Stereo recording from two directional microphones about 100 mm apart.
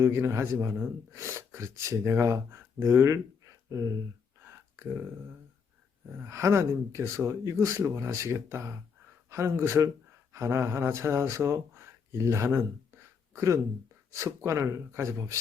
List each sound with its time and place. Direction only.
0.0 s speech: 30° right (ahead or behind)
6.1 s speech: 30° right (ahead or behind)